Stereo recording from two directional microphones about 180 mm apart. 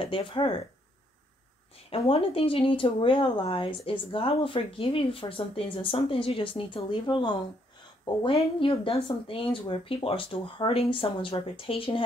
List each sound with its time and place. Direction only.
0.0 s speech: 30° left (ahead or behind)
1.9 s speech: 30° left (ahead or behind)